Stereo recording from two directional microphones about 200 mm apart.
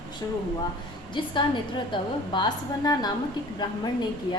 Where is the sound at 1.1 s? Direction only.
25° left (ahead or behind).